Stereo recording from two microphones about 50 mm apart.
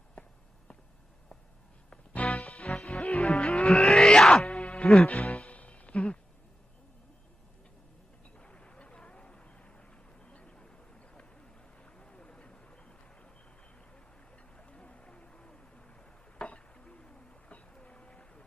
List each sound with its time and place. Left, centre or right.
0.2 s walk: left
1.9 s music: left
3.0 s music: left
3.2 s music: centre
4.4 s music: left
8.4 s a sound: left
14.5 s a sound: left